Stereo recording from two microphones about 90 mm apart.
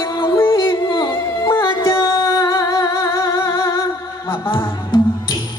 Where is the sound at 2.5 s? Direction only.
35° left (ahead or behind).